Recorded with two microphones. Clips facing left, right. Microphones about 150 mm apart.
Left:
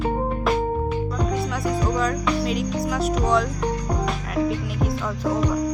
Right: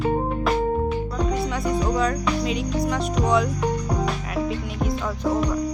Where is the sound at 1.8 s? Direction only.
Centre (ahead or behind).